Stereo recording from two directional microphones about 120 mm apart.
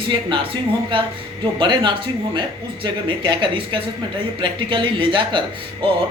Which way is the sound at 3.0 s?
40° right (ahead or behind).